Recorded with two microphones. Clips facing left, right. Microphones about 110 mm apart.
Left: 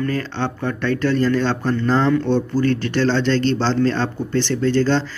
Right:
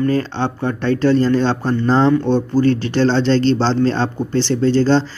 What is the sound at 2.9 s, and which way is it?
Speech, 30° right (ahead or behind).